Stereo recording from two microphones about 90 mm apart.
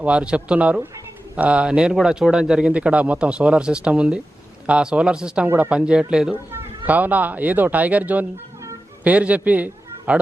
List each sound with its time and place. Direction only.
0.0 s a man's voice: 10° right (ahead or behind)
6.3 s a man's voice: 20° right (ahead or behind)